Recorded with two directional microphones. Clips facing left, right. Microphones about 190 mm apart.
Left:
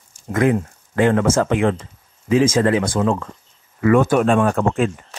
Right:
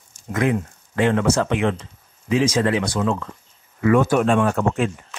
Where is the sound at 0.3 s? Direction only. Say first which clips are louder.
Left 4 dB; 45° left (ahead or behind).